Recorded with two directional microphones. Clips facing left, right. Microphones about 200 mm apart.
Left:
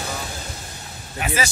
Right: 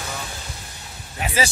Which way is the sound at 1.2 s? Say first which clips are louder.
Right 1 dB; 30° right (ahead or behind).